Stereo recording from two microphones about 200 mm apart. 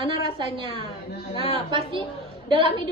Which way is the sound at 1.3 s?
30° left (ahead or behind).